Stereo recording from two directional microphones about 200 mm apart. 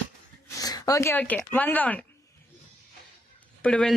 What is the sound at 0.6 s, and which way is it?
Speech, 20° left (ahead or behind).